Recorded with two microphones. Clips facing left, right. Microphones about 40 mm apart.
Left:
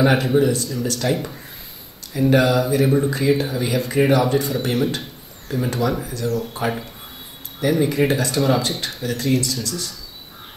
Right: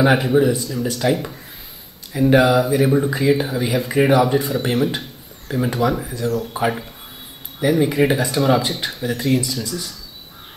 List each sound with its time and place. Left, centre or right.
0.0 s speech: centre